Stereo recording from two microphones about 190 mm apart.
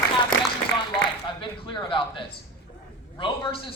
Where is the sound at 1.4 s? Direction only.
25° left (ahead or behind).